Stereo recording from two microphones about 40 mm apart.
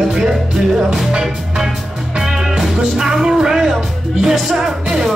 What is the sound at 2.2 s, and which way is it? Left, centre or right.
Music, centre.